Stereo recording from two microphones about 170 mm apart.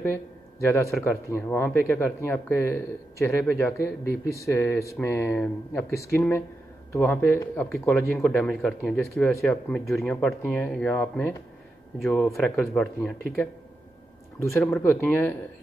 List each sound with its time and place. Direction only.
0.7 s speech: 15° left (ahead or behind)
14.4 s speech: 15° left (ahead or behind)